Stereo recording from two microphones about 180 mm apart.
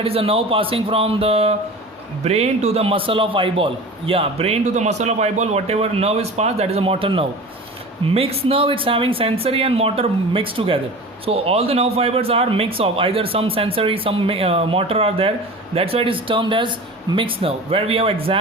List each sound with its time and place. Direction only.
0.0 s a man's voice: 30° right (ahead or behind)